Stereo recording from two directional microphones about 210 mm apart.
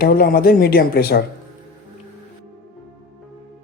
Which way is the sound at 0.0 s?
45° left (ahead or behind).